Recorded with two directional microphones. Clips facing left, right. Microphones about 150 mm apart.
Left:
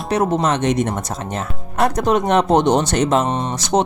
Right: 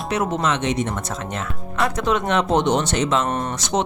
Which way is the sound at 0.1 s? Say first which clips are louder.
Left 5 dB; 35° left (ahead or behind).